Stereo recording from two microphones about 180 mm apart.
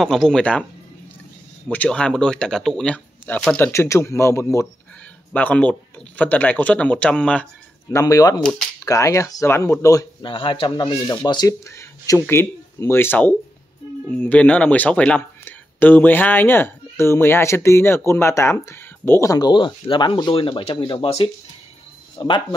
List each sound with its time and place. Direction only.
0.0 s speech: centre (ahead or behind)
1.7 s speech: 5° left (ahead or behind)
7.9 s speech: 20° left (ahead or behind)
8.4 s speech: 5° left (ahead or behind)
8.7 s speech: 20° left (ahead or behind)
10.3 s speech: 30° left (ahead or behind)